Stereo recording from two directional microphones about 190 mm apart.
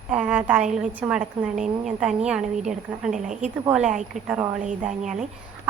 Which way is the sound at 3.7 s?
5° right (ahead or behind).